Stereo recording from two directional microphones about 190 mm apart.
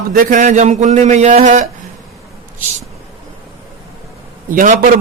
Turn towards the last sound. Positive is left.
turn(degrees=-45)  # may be behind; listen again after turning